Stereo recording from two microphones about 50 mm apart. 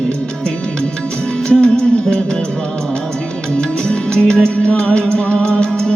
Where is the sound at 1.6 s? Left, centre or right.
Centre.